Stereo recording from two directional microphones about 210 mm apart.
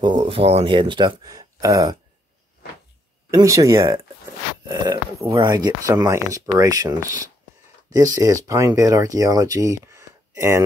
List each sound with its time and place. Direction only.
0.0 s speech: 25° right (ahead or behind)
3.3 s speech: 15° right (ahead or behind)